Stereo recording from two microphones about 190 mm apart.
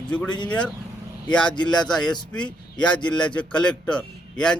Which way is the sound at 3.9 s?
5° left (ahead or behind).